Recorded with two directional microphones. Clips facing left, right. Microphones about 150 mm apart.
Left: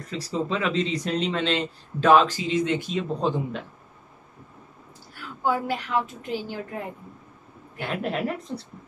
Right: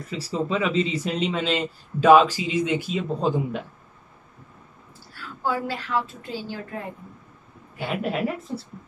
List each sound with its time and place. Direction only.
0.1 s speech: 5° right (ahead or behind)
5.1 s a woman's voice: 20° left (ahead or behind)
7.8 s speech: 5° right (ahead or behind)